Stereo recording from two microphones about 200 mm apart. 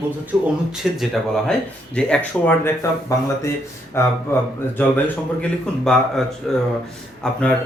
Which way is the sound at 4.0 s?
15° left (ahead or behind).